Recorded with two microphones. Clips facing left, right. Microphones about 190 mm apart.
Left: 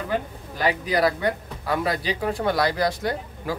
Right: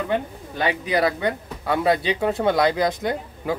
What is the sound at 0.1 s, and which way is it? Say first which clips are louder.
Speech: right 3 dB; 25° right (ahead or behind).